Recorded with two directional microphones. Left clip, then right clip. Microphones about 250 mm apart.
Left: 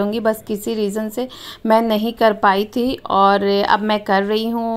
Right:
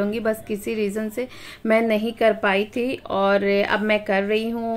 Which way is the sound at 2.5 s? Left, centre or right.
Centre.